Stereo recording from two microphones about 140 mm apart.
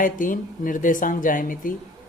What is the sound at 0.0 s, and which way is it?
Speech, 75° left (ahead or behind).